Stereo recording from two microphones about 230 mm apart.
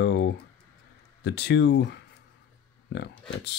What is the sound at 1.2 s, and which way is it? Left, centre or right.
Speech, left.